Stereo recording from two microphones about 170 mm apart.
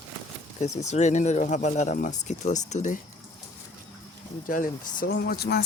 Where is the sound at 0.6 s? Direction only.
40° left (ahead or behind).